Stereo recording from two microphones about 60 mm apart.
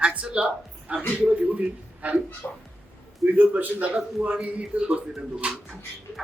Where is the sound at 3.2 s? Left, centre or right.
Right.